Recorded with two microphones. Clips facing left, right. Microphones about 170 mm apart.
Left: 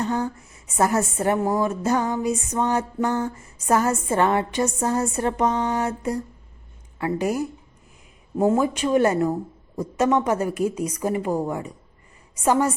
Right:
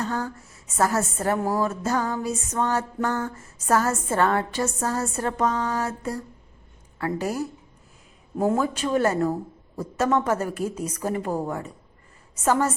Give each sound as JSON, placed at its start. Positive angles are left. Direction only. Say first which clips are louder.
{"t": 0.0, "sound": "a sound", "louder": "left 3 dB", "side_deg": 15}
{"t": 0.8, "sound": "a woman's voice", "louder": "left 2 dB", "side_deg": 20}
{"t": 8.5, "sound": "a woman's voice", "louder": "left 3 dB", "side_deg": 15}